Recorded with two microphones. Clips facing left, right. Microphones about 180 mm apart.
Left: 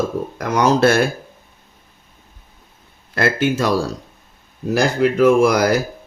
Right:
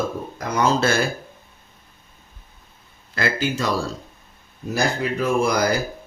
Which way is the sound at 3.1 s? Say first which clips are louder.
Left 5 dB; 65° left (ahead or behind).